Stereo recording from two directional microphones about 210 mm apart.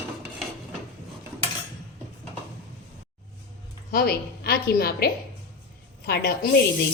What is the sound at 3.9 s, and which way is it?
A woman's voice, 50° left (ahead or behind).